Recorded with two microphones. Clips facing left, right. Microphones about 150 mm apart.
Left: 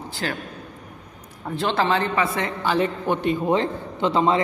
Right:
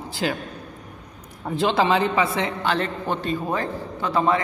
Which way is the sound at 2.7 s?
15° left (ahead or behind).